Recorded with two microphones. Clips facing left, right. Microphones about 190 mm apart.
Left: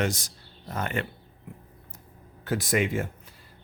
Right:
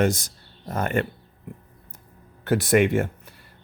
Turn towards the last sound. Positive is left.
turn(degrees=-65)  # may be behind; listen again after turning